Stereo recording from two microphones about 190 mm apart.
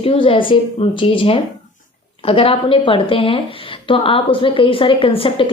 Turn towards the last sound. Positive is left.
turn(degrees=30)  # may be behind; listen again after turning